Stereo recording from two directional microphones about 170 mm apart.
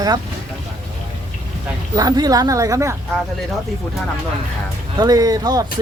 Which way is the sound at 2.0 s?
25° right (ahead or behind).